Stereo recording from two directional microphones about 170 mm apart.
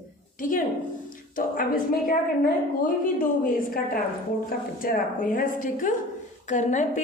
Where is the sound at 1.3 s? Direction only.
55° left (ahead or behind).